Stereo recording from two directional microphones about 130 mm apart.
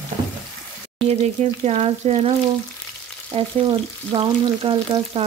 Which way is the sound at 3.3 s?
45° right (ahead or behind).